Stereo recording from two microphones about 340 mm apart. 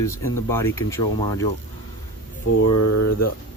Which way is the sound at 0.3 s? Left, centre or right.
Centre.